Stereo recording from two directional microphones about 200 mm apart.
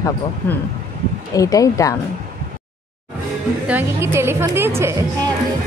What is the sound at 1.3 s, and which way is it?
Speech, 15° left (ahead or behind).